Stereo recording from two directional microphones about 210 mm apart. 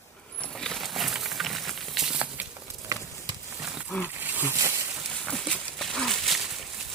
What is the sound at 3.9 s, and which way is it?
Speech, 10° left (ahead or behind).